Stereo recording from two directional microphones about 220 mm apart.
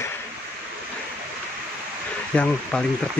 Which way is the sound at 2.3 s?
5° left (ahead or behind).